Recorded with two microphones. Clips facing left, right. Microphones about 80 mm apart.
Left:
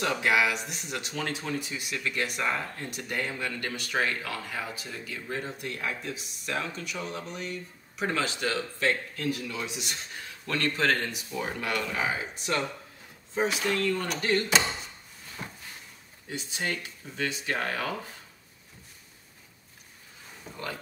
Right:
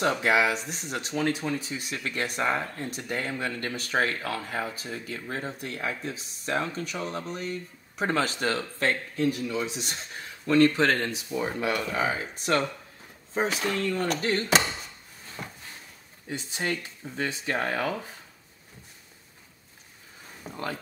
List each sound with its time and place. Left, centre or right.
0.0 s speech: right
9.1 s speech: right
10.4 s speech: right
15.4 s a sound: centre
16.3 s speech: right